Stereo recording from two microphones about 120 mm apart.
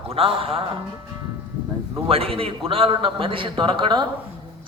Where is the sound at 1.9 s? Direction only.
50° right (ahead or behind).